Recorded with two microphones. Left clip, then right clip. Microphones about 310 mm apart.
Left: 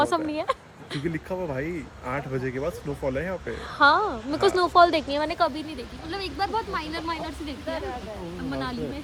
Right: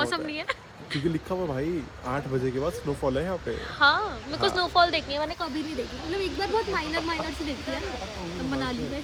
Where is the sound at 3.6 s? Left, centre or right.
Left.